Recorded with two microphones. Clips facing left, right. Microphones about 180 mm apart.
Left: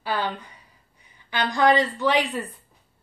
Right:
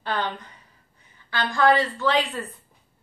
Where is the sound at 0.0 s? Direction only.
10° left (ahead or behind).